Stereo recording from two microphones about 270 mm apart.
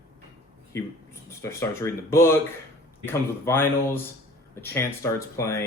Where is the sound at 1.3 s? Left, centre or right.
Centre.